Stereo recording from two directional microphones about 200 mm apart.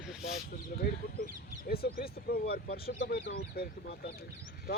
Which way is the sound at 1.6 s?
50° left (ahead or behind).